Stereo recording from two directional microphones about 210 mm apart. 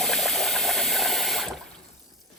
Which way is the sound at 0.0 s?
Centre (ahead or behind).